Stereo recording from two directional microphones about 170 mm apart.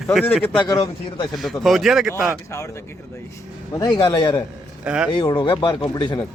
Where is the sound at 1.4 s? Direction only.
Centre (ahead or behind).